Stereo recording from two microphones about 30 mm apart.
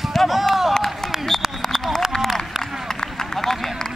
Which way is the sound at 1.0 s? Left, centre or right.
Centre.